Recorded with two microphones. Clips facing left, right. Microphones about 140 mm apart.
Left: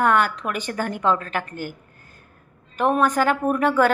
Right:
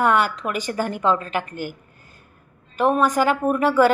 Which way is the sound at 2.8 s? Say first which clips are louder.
Right 1 dB; 10° right (ahead or behind).